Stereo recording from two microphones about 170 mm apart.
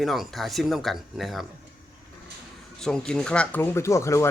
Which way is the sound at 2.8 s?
5° left (ahead or behind).